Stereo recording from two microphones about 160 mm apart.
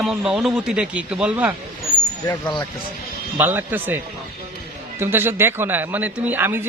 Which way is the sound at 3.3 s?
15° right (ahead or behind).